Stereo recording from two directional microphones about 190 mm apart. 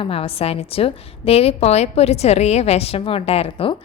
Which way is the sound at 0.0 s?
30° left (ahead or behind).